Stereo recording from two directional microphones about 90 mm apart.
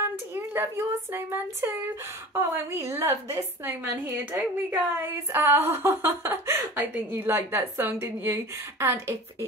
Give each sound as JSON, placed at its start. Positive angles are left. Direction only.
{"t": 0.3, "sound": "a woman's voice", "side_deg": -25}